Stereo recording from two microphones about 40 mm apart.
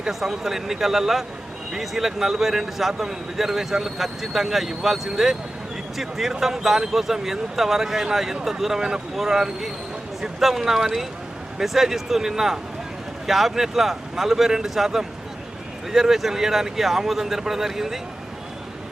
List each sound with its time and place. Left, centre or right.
0.1 s a man's voice: centre